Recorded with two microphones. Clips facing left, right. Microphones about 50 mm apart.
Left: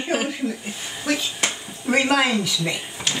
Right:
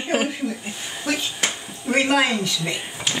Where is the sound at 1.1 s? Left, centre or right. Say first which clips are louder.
Left 1 dB; centre.